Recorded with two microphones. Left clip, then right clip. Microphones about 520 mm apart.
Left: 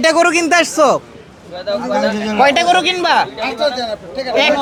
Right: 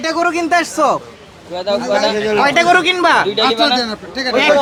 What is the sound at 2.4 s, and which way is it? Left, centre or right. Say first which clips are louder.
Speech: left 1 dB; centre.